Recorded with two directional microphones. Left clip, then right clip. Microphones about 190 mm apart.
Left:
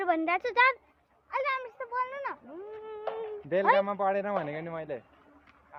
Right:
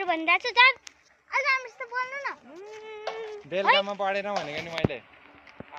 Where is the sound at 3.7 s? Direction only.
30° left (ahead or behind).